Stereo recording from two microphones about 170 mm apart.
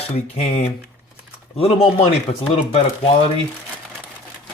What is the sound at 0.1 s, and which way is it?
Speech, 40° left (ahead or behind).